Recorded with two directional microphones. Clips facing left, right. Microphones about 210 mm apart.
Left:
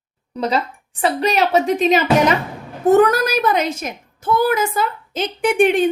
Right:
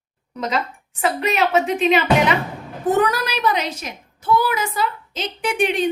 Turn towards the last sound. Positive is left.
turn(degrees=50)  # may be behind; listen again after turning